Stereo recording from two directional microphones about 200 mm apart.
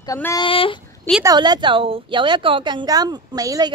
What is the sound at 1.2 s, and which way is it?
A woman's voice, 20° right (ahead or behind).